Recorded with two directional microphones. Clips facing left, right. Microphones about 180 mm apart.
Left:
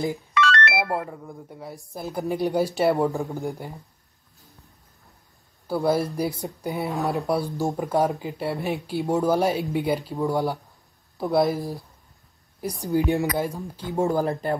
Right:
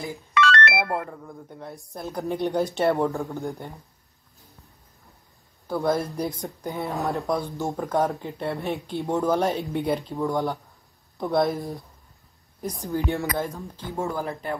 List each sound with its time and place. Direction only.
0.3 s ringtone: 60° right (ahead or behind)
0.7 s speech: 5° left (ahead or behind)
5.7 s speech: 5° left (ahead or behind)
12.9 s speech: 15° left (ahead or behind)
14.0 s speech: 40° left (ahead or behind)